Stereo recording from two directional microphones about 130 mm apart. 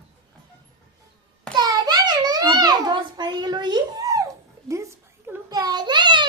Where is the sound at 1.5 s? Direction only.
30° right (ahead or behind).